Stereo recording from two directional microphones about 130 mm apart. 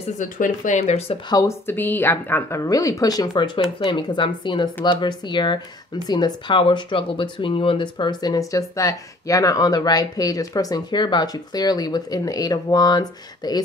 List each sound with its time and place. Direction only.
0.2 s speech: 75° left (ahead or behind); by 1.1 s 55° left (ahead or behind)
1.3 s speech: 20° left (ahead or behind)